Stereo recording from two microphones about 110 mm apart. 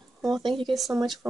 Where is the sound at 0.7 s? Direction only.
Centre (ahead or behind).